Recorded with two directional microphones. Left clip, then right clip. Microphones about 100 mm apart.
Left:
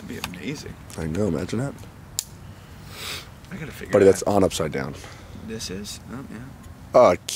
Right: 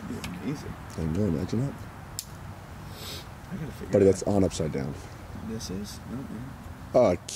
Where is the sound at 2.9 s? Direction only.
20° left (ahead or behind).